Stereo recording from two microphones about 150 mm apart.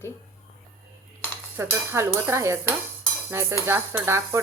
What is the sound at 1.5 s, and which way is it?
Speech, 15° right (ahead or behind).